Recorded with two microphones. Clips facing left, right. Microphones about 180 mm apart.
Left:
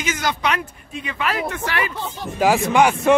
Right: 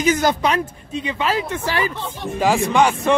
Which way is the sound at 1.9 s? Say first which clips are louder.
Right 2 dB; 5° left (ahead or behind).